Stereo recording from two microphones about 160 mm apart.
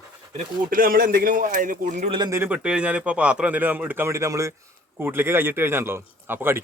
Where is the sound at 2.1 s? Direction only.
25° right (ahead or behind).